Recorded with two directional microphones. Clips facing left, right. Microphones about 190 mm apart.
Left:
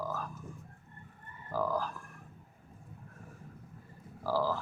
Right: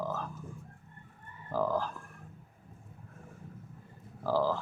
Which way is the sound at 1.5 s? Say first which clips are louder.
Right 2 dB; 25° right (ahead or behind).